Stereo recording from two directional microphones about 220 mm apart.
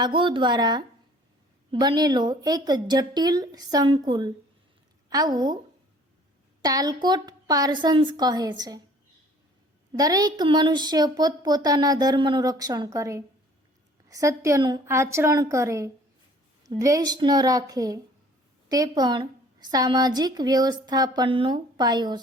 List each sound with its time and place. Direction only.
0.0 s a woman's voice: 20° right (ahead or behind)
6.6 s speech: 15° right (ahead or behind)
10.0 s a woman's voice: 15° right (ahead or behind)